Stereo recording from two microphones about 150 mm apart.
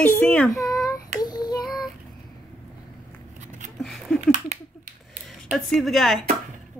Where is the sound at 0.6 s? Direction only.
20° left (ahead or behind).